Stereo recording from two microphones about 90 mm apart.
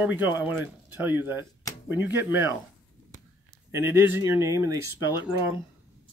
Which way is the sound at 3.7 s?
25° right (ahead or behind).